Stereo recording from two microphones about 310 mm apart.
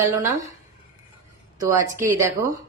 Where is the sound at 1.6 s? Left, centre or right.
Centre.